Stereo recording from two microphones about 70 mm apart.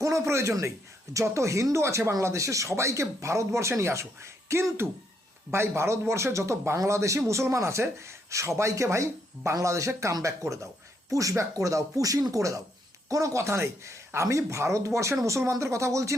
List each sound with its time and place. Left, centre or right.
0.0 s a man's voice: right